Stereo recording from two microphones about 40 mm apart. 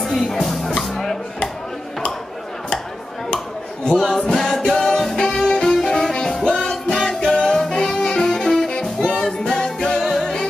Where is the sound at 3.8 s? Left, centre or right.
Centre.